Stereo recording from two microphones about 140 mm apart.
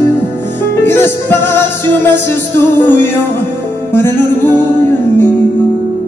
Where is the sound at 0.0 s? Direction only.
15° left (ahead or behind).